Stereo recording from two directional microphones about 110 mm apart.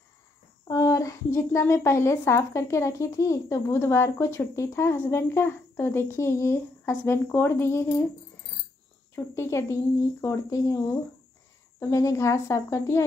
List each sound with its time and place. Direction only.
0.7 s a woman's voice: 30° left (ahead or behind)
9.1 s a woman's voice: 25° left (ahead or behind)
11.9 s a woman's voice: 30° left (ahead or behind)